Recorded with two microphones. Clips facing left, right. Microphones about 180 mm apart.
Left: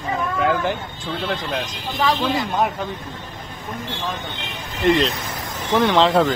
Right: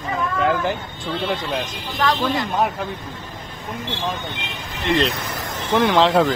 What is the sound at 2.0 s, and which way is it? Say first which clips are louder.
Speech: even; centre (ahead or behind).